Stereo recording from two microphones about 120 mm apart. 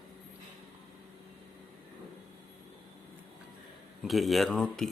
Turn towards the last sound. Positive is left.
turn(degrees=5)  # may be behind; listen again after turning